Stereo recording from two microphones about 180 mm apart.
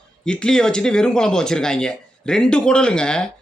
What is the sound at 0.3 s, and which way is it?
Speech, 5° left (ahead or behind).